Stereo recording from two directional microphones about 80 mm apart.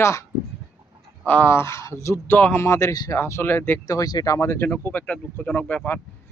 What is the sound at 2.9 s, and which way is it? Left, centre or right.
Speech, left.